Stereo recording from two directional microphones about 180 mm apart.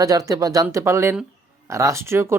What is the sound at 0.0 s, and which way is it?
Speech, 20° right (ahead or behind).